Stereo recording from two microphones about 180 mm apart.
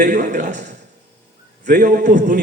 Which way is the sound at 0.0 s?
50° right (ahead or behind).